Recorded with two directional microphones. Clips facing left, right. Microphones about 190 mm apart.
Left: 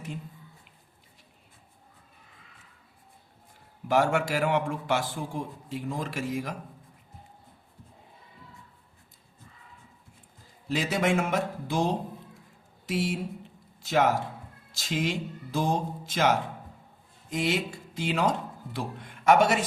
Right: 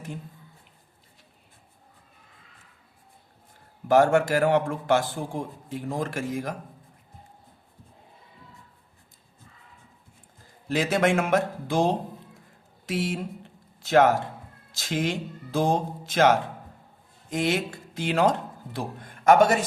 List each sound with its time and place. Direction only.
3.8 s a man's voice: 45° right (ahead or behind)
10.7 s a man's voice: 50° right (ahead or behind)
13.9 s a man's voice: 50° right (ahead or behind)